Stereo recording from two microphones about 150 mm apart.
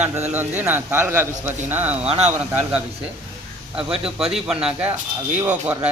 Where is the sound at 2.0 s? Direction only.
45° right (ahead or behind).